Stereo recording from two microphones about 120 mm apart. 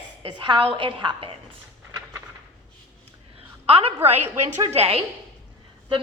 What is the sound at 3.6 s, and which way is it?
A woman's voice, 55° right (ahead or behind).